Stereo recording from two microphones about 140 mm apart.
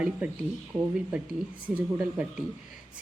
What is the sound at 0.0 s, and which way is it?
Speech, 10° right (ahead or behind).